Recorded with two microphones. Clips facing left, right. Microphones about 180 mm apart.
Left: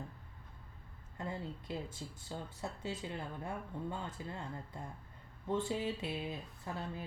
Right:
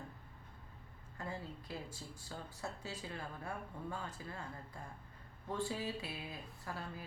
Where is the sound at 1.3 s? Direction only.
20° left (ahead or behind).